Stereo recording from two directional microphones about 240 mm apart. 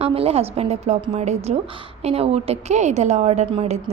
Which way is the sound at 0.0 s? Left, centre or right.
Right.